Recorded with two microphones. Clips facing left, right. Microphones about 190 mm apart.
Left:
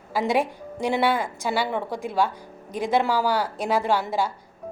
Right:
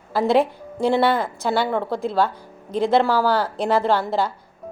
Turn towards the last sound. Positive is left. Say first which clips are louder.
# right 3 dB
turn(degrees=10)  # may be behind; listen again after turning